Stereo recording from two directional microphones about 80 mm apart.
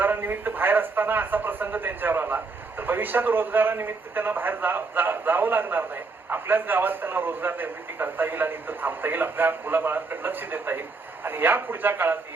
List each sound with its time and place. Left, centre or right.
0.0 s a man's voice: right